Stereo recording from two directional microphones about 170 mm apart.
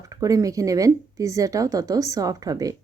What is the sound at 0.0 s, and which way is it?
Speech, 20° right (ahead or behind).